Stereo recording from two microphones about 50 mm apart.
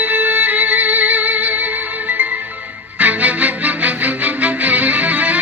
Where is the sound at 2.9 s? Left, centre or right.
Right.